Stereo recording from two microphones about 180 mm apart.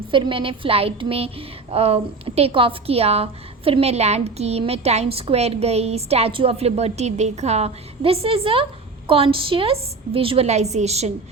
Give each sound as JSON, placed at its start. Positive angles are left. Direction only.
{"t": 0.1, "sound": "speech", "side_deg": -30}